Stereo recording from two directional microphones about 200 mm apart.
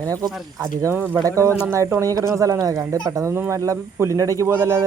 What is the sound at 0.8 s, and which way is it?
Speech, 10° right (ahead or behind).